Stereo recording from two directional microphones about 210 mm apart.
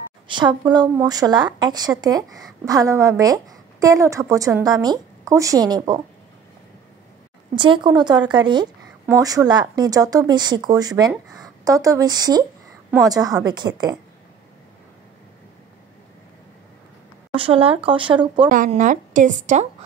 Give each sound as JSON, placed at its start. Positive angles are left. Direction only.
{"t": 0.3, "sound": "speech", "side_deg": -20}
{"t": 7.5, "sound": "speech", "side_deg": -25}
{"t": 17.3, "sound": "speech", "side_deg": -25}
{"t": 18.5, "sound": "a woman's voice", "side_deg": -40}